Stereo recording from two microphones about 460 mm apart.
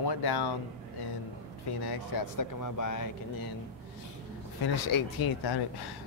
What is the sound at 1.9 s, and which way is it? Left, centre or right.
Speech, left.